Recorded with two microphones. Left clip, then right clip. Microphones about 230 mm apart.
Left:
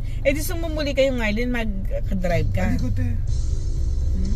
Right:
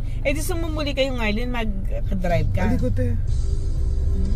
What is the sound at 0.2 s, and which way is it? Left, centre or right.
A man's voice, centre.